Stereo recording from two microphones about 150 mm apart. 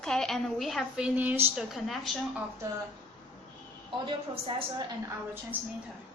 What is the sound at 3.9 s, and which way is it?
Speech, 35° right (ahead or behind).